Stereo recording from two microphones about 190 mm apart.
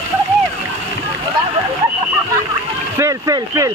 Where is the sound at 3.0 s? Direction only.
15° right (ahead or behind).